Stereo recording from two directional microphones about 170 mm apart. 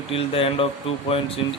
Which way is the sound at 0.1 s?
35° left (ahead or behind).